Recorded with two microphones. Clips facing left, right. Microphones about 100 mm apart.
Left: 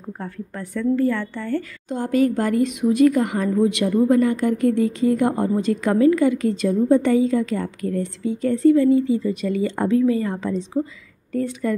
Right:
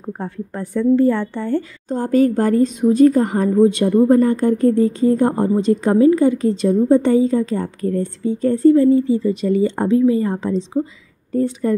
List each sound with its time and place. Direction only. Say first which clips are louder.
0.0 s a woman's voice: right 5 dB; 25° right (ahead or behind)